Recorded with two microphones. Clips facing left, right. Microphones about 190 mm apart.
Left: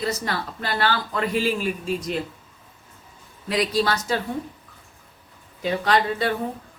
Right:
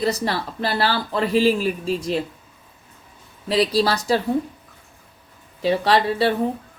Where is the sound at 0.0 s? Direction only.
35° right (ahead or behind).